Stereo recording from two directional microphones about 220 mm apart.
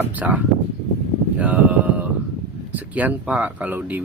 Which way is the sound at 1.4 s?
5° right (ahead or behind).